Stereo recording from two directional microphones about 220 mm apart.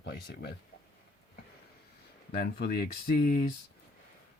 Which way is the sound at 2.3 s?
45° left (ahead or behind).